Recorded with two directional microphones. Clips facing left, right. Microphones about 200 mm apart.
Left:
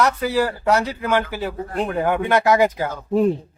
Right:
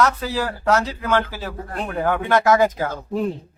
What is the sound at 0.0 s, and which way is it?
Speech, 10° left (ahead or behind).